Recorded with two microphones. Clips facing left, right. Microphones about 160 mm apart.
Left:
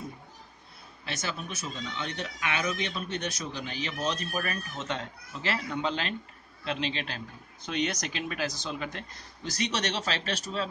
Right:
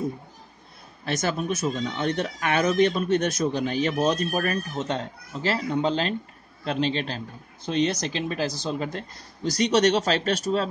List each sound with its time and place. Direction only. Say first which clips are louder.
1.0 s a man's voice: right 10 dB; 45° right (ahead or behind)